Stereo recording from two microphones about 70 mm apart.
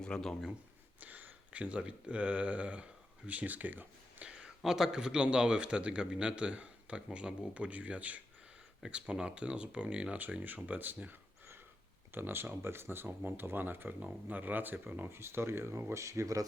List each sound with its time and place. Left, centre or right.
0.0 s speech: centre
0.9 s speech: right
4.3 s speech: centre; by 16.4 s right